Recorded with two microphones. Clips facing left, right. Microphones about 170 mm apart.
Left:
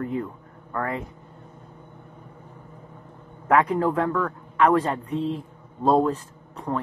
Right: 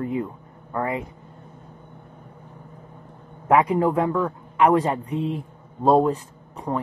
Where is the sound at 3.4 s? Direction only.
10° right (ahead or behind).